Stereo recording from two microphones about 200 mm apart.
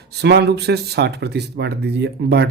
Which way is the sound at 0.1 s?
55° right (ahead or behind).